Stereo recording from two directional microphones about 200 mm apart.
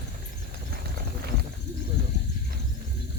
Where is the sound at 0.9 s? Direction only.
50° right (ahead or behind).